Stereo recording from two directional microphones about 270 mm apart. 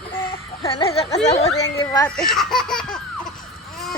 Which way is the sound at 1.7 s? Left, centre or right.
Centre.